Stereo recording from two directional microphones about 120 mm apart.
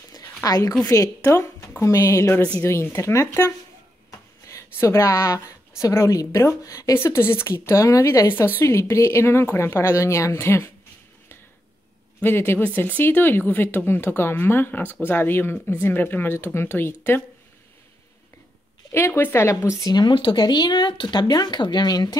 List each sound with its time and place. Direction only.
0.1 s a sound: 30° left (ahead or behind)
0.8 s a woman's voice: 25° left (ahead or behind)
12.2 s a woman's voice: 15° left (ahead or behind)
18.9 s speech: 20° left (ahead or behind)